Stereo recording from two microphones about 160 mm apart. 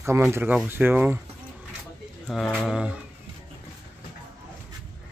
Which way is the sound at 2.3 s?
Centre (ahead or behind).